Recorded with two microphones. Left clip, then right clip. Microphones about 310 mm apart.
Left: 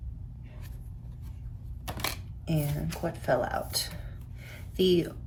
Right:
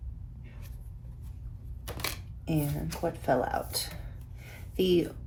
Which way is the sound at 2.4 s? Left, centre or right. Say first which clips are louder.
Right 1 dB; centre.